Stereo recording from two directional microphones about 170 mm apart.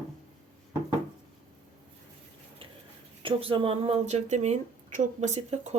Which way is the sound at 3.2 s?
30° right (ahead or behind).